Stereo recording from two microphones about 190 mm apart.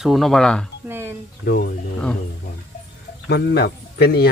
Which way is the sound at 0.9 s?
10° right (ahead or behind).